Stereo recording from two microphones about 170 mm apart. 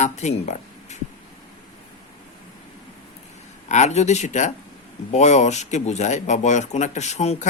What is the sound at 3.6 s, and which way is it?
Speech, 45° left (ahead or behind).